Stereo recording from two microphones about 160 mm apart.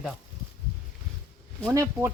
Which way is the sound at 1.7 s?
20° right (ahead or behind).